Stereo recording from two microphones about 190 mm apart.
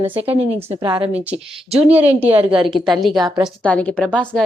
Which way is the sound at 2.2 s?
30° right (ahead or behind).